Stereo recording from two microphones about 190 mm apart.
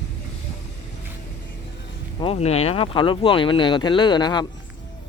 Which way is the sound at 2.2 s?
30° left (ahead or behind).